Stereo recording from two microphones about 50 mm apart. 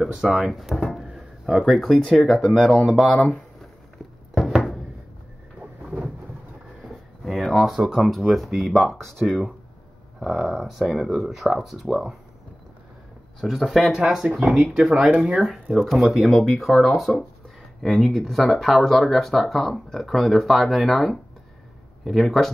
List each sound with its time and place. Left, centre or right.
0.0 s speech: centre
1.0 s a sound: centre
1.6 s speech: centre
7.2 s a sound: centre
7.7 s speech: centre
13.4 s speech: centre
13.9 s speech: centre
14.5 s speech: centre
15.1 s speech: centre
15.8 s speech: centre